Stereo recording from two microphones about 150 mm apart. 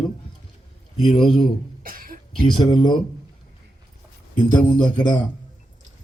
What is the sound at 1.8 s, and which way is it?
Cough, 70° right (ahead or behind).